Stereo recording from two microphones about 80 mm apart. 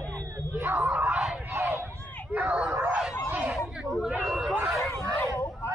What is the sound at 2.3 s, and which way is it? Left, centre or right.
Dog, right.